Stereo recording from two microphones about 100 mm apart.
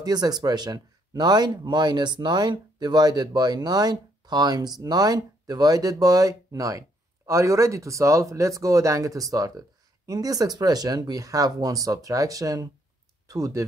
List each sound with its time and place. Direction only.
0.0 s speech: 40° right (ahead or behind)